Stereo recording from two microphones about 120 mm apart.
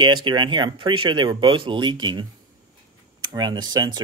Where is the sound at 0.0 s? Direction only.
40° right (ahead or behind).